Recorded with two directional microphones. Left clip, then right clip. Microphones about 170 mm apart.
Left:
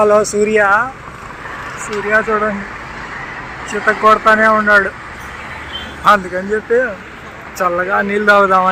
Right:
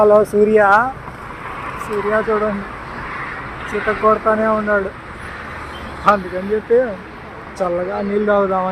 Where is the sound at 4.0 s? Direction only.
10° left (ahead or behind).